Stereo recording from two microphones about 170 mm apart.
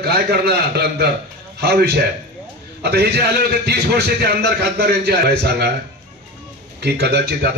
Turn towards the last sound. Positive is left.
turn(degrees=-75)  # may be behind; listen again after turning